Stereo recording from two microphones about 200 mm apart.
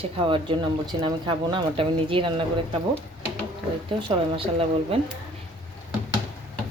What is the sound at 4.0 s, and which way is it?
Speech, 25° right (ahead or behind).